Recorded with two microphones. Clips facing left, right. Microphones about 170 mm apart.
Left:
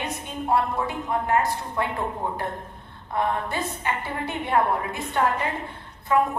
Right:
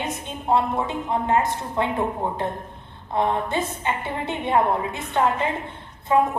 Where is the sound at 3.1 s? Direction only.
20° right (ahead or behind).